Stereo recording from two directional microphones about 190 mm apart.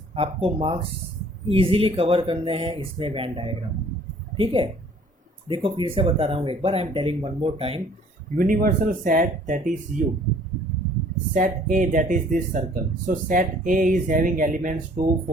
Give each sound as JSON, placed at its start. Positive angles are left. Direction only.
{"t": 0.1, "sound": "speech", "side_deg": -30}
{"t": 8.4, "sound": "speech", "side_deg": -45}
{"t": 11.3, "sound": "speech", "side_deg": -45}